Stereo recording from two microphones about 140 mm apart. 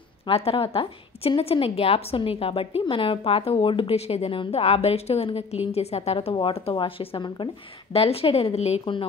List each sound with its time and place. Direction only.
0.3 s a woman's voice: 40° left (ahead or behind)